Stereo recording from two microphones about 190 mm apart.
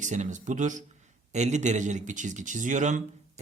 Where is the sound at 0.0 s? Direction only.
40° right (ahead or behind).